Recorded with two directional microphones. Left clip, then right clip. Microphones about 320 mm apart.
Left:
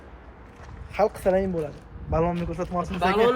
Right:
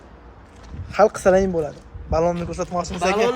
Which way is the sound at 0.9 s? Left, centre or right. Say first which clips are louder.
Right 7 dB; right.